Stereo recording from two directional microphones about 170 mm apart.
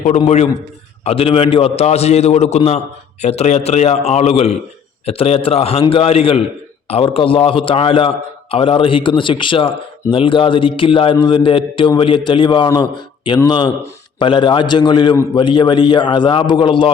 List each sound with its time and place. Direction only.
1.0 s a man's voice: 35° left (ahead or behind)